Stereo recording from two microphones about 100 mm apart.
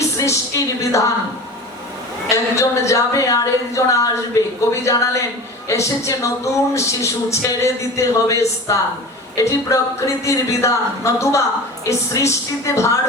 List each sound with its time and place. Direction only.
0.2 s speech: 30° left (ahead or behind)
2.3 s a woman's voice: 30° left (ahead or behind)